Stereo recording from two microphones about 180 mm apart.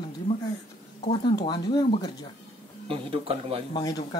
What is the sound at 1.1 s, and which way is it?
Speech, 25° left (ahead or behind).